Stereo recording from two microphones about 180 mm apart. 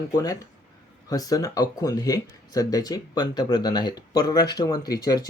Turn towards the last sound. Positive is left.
turn(degrees=20)  # may be behind; listen again after turning